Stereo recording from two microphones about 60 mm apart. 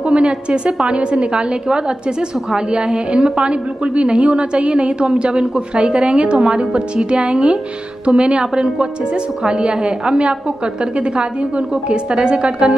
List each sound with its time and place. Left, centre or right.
0.0 s a woman's voice: centre